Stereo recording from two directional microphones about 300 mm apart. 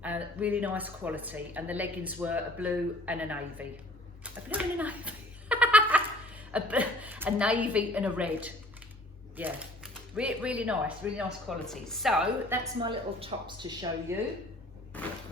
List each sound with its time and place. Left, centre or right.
0.0 s speech: centre
4.2 s a sound: centre
6.5 s speech: centre
12.8 s speech: centre